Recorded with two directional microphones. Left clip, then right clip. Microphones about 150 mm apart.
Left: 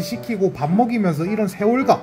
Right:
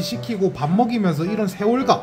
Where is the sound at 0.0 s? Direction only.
25° left (ahead or behind).